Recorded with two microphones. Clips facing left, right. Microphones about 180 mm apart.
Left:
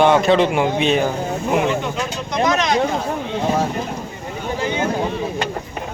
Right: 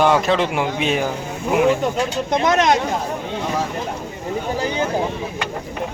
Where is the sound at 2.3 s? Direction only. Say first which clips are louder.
Right 1 dB; 55° right (ahead or behind).